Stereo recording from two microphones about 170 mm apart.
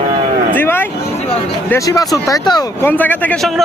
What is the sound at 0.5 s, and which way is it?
Vehicle, 10° left (ahead or behind).